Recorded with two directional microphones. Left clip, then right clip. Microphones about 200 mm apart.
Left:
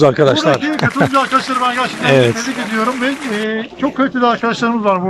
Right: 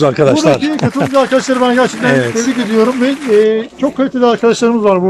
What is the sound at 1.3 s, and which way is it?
Speech, 30° right (ahead or behind).